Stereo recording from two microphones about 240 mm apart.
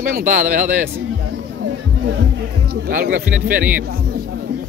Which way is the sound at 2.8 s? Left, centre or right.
Right.